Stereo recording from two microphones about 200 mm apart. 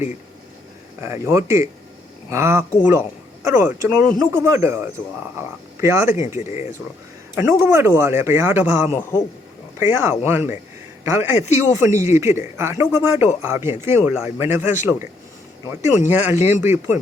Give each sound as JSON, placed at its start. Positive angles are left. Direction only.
{"t": 1.0, "sound": "a man's voice", "side_deg": -15}
{"t": 6.4, "sound": "speech", "side_deg": 35}
{"t": 7.3, "sound": "a man's voice", "side_deg": -10}
{"t": 15.8, "sound": "a man's voice", "side_deg": -15}